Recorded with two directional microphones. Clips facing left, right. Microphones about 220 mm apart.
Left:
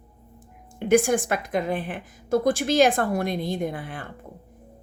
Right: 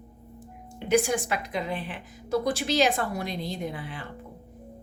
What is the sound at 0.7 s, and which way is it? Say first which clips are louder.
A woman's voice: left 4 dB; 50° left (ahead or behind).